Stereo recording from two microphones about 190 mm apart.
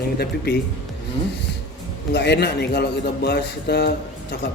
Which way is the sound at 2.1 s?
60° left (ahead or behind).